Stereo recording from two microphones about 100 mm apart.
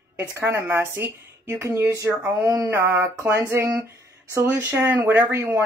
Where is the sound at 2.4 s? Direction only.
40° right (ahead or behind).